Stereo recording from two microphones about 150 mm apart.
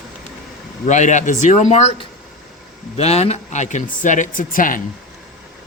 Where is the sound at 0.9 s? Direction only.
55° left (ahead or behind).